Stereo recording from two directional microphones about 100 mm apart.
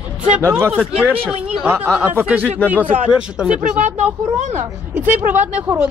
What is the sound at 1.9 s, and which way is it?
Speech, 20° right (ahead or behind).